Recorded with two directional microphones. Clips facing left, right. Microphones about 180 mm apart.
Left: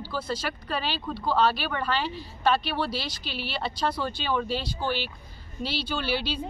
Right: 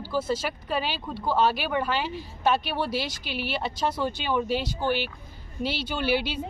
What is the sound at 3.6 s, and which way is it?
Speech, 15° right (ahead or behind).